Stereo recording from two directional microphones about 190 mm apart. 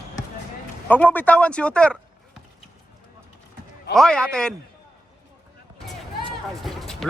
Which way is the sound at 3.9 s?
5° left (ahead or behind).